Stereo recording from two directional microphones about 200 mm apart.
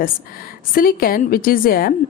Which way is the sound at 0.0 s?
45° left (ahead or behind).